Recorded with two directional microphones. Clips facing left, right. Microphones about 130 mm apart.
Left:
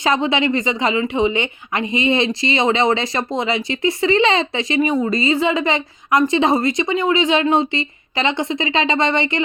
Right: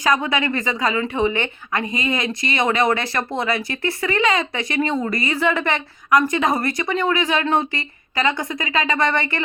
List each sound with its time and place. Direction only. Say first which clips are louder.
0.0 s a woman's voice: left 2 dB; 25° left (ahead or behind)